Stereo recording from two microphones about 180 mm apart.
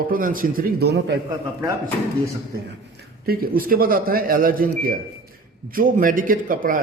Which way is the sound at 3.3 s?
55° right (ahead or behind).